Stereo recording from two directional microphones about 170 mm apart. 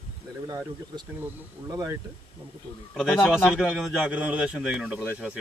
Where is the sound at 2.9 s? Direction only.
Centre (ahead or behind).